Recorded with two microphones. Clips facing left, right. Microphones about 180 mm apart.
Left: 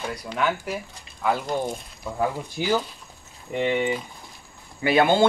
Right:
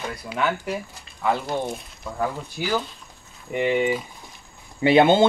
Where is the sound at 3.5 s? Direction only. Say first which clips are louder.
Right 2 dB; 10° right (ahead or behind).